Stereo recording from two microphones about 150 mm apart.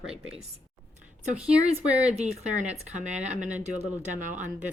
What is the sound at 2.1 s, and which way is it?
Speech, 50° right (ahead or behind).